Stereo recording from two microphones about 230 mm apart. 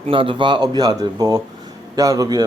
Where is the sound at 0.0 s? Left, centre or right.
Right.